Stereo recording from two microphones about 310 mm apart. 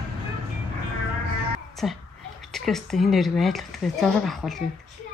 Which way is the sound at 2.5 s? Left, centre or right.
Centre.